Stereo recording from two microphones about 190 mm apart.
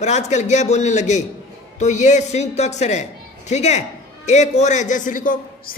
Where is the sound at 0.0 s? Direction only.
35° left (ahead or behind).